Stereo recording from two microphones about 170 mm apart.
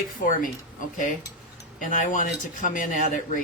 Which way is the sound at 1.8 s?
50° left (ahead or behind).